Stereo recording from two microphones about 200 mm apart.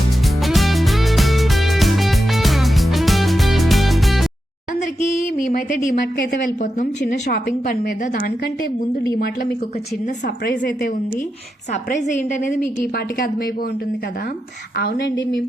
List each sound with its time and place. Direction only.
0.4 s music: centre (ahead or behind)
5.5 s a woman's voice: 40° left (ahead or behind)
6.1 s a woman's voice: 50° left (ahead or behind)
10.2 s a woman's voice: 55° left (ahead or behind)
11.7 s a woman's voice: 35° left (ahead or behind)
12.8 s a woman's voice: 45° left (ahead or behind)
14.8 s a woman's voice: 55° left (ahead or behind)